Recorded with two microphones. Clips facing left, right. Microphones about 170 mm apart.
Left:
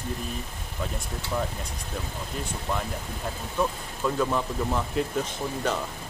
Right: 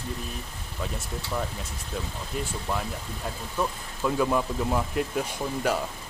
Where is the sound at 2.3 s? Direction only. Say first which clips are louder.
Right 4 dB; 5° right (ahead or behind).